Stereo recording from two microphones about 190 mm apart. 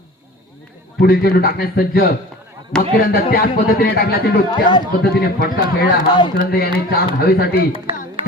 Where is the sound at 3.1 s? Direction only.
50° left (ahead or behind).